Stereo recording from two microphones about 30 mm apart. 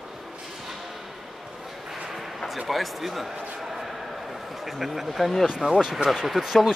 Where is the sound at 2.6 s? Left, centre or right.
Centre.